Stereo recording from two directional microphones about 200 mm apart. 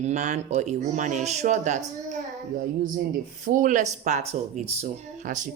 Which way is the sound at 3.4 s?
40° right (ahead or behind).